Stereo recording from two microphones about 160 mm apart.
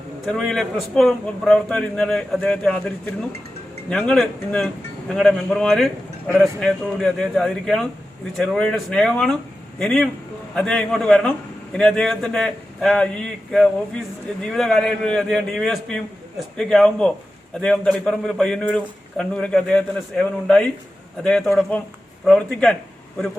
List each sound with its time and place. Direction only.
0.3 s speech: centre (ahead or behind)
21.2 s a man's voice: 5° left (ahead or behind)